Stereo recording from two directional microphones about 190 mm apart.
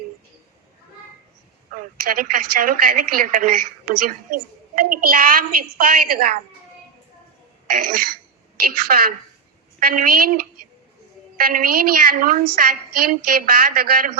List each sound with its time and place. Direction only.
1.7 s a woman's voice: 45° right (ahead or behind)
8.6 s a woman's voice: 50° right (ahead or behind)
11.3 s a woman's voice: 50° right (ahead or behind)